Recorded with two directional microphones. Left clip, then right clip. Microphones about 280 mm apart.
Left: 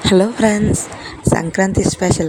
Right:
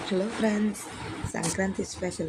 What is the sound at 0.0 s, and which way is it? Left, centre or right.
Speech, left.